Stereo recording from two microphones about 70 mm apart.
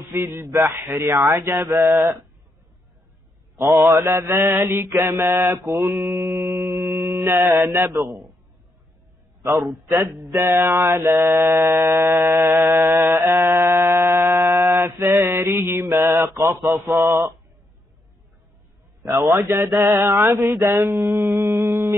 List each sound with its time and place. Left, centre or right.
0.1 s mantra: right
3.8 s mantra: right
10.3 s mantra: right
16.6 s mantra: right
19.2 s speech: right
19.8 s mantra: right
20.2 s speech: right
21.4 s mantra: right